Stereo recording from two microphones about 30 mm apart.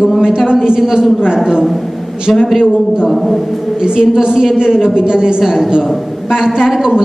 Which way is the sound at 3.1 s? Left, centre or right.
Centre.